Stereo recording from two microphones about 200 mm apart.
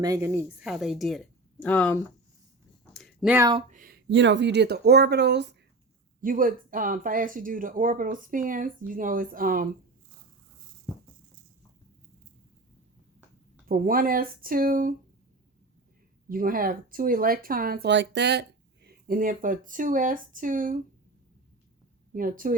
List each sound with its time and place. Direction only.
0.0 s a woman's voice: 15° right (ahead or behind); by 2.0 s 5° left (ahead or behind)
2.9 s a sound: centre (ahead or behind)
3.3 s speech: 20° right (ahead or behind)
3.7 s speech: 45° right (ahead or behind)
6.2 s speech: 45° right (ahead or behind)
13.7 s speech: 45° right (ahead or behind)
16.3 s speech: 45° right (ahead or behind)
22.1 s speech: 45° right (ahead or behind)